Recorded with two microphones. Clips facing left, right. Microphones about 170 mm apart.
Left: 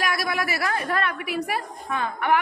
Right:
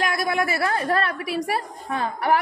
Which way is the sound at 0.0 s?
25° right (ahead or behind).